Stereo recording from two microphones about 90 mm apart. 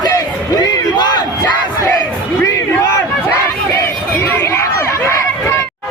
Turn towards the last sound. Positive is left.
turn(degrees=30)  # may be behind; listen again after turning